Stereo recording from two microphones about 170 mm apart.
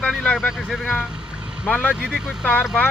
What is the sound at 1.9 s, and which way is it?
Speech, 5° right (ahead or behind).